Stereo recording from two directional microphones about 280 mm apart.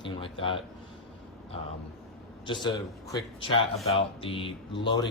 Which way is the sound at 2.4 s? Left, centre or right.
Centre.